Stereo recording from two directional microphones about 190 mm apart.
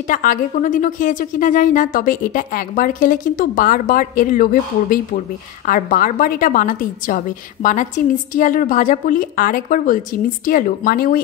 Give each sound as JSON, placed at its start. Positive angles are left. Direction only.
{"t": 0.1, "sound": "a woman's voice", "side_deg": 45}